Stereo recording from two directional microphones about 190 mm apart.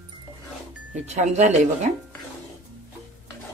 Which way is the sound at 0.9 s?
35° right (ahead or behind).